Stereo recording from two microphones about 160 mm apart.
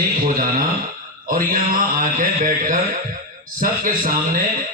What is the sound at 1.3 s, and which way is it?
A man's voice, 60° right (ahead or behind).